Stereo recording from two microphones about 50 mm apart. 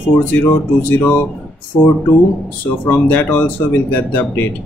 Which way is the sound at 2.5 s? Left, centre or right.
Left.